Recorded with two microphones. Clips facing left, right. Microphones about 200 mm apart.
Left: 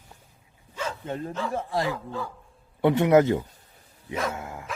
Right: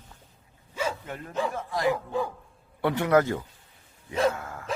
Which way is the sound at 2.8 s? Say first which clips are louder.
Left 4 dB; 20° left (ahead or behind).